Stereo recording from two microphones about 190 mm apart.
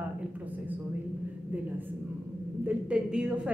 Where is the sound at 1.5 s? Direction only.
10° right (ahead or behind).